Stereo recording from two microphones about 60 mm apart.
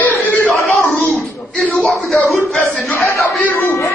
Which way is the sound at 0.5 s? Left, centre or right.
Centre.